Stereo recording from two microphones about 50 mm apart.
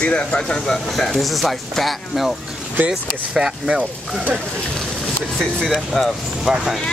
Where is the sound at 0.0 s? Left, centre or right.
Left.